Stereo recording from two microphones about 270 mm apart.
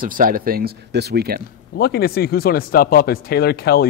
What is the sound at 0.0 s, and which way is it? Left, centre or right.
A man's voice, right.